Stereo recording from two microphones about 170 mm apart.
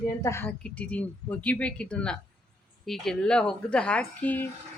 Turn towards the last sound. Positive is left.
turn(degrees=10)  # may be behind; listen again after turning